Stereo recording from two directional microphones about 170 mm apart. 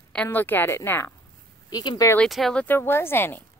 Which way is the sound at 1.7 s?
25° left (ahead or behind).